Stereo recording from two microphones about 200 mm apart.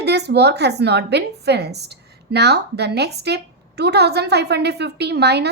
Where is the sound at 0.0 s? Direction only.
55° right (ahead or behind).